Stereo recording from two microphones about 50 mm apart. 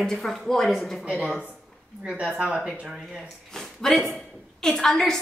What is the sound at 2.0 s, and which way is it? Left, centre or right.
Speech, centre.